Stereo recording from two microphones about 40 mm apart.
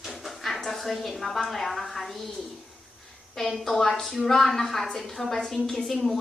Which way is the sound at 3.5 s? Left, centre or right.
Centre.